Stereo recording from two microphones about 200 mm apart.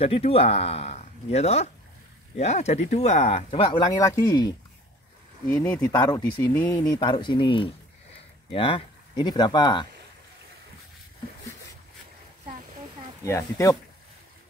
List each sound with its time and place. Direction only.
0.0 s speech: 30° left (ahead or behind)
5.5 s speech: 10° left (ahead or behind)
13.2 s speech: 15° left (ahead or behind)